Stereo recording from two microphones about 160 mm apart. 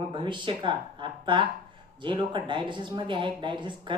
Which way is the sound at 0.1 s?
30° right (ahead or behind).